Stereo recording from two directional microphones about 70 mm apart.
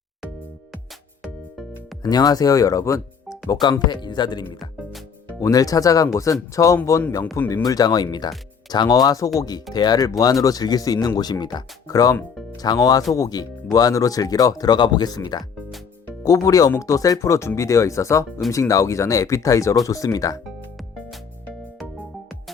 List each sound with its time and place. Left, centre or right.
2.0 s speech: left
3.5 s speech: left
5.4 s speech: left
7.5 s speech: left
9.7 s speech: left
10.1 s speech: left
11.2 s speech: left
16.2 s speech: left